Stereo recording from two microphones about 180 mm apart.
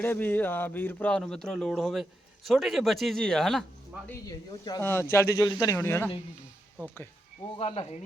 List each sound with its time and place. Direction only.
0.0 s speech: 10° left (ahead or behind)
4.0 s a man's voice: 15° left (ahead or behind)
7.5 s speech: 35° left (ahead or behind)